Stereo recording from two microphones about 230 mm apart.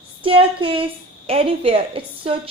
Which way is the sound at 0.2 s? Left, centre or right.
Right.